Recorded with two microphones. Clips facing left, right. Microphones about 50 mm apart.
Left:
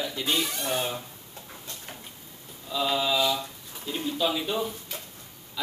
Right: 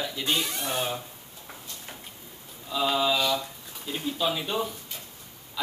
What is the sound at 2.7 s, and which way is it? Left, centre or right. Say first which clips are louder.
Mantra: right 1 dB; centre.